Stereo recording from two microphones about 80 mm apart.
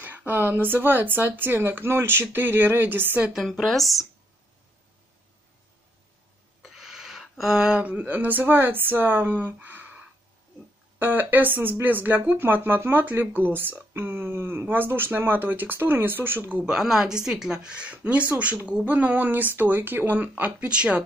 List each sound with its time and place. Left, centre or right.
0.0 s speech: right
3.4 s speech: centre
6.6 s speech: centre; by 16.6 s right
16.6 s speech: centre